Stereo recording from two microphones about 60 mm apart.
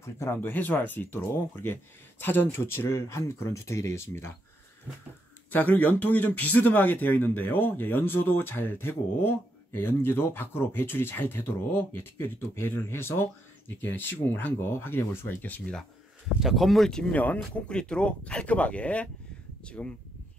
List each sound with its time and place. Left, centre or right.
0.0 s speech: left
0.4 s a man's voice: left
5.5 s a man's voice: left
16.3 s speech: centre
17.1 s speech: left
17.4 s speech: centre